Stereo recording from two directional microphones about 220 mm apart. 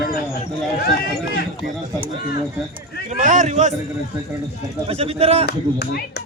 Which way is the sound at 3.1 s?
35° right (ahead or behind).